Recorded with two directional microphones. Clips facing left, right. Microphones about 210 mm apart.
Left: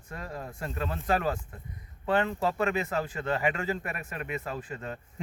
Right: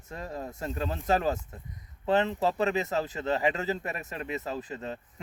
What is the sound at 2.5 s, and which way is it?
Speech, 20° right (ahead or behind).